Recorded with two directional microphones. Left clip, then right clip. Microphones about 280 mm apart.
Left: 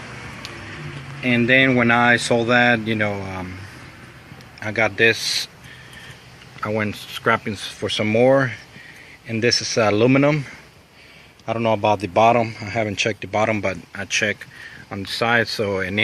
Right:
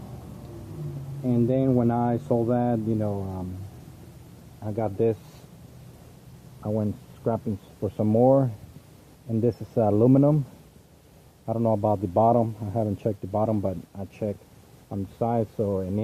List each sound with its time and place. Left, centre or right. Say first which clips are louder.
1.2 s a man's voice: left 9 dB; left
4.6 s a man's voice: left 8 dB; left
6.6 s a man's voice: left 6 dB; left
11.4 s a man's voice: left 6 dB; left